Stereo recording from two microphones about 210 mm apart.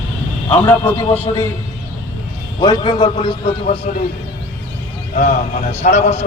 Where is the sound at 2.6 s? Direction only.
20° left (ahead or behind).